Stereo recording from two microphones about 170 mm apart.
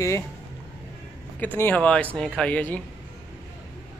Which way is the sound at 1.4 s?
10° left (ahead or behind).